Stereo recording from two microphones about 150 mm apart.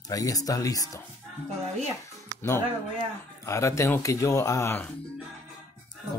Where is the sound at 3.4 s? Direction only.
20° left (ahead or behind).